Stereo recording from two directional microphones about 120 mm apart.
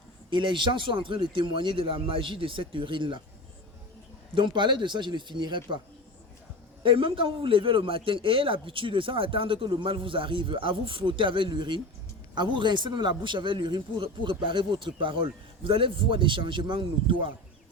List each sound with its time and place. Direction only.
0.3 s a man's voice: 40° right (ahead or behind)
4.4 s a man's voice: 40° right (ahead or behind)
6.8 s a man's voice: 45° right (ahead or behind)